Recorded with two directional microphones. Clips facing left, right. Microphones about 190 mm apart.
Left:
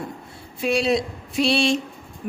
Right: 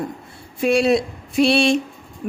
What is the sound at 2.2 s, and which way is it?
Music, 45° right (ahead or behind).